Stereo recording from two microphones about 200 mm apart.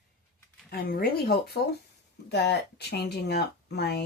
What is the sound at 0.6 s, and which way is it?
Speech, 50° left (ahead or behind).